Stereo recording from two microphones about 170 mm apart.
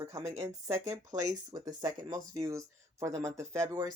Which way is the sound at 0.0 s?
20° right (ahead or behind).